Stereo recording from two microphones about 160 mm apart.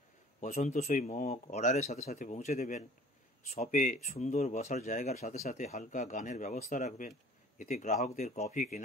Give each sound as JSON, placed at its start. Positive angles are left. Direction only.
{"t": 0.4, "sound": "speech", "side_deg": 45}